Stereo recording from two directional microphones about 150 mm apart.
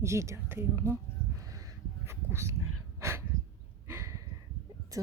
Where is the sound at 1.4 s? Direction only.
20° right (ahead or behind).